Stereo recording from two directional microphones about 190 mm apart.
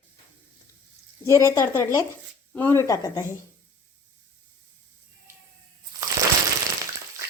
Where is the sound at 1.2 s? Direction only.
15° left (ahead or behind).